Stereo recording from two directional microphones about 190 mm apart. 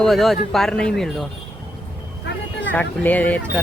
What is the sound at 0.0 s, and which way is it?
Speech, centre (ahead or behind).